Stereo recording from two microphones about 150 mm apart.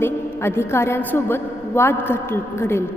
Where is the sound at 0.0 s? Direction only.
15° left (ahead or behind).